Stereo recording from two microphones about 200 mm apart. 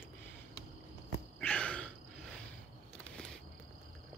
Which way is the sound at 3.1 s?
5° left (ahead or behind).